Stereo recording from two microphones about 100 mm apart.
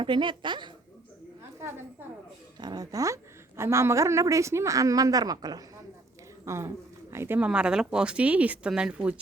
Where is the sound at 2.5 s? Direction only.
45° right (ahead or behind).